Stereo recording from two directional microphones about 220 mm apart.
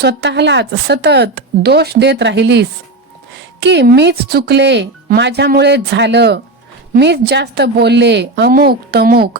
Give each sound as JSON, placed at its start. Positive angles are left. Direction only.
{"t": 0.0, "sound": "speech", "side_deg": -50}